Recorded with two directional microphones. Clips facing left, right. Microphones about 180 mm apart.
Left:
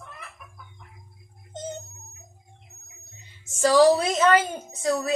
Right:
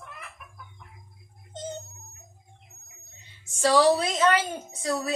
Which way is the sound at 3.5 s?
45° left (ahead or behind).